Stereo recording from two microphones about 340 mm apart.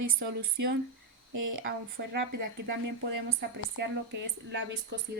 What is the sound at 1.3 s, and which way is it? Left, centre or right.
Speech, right.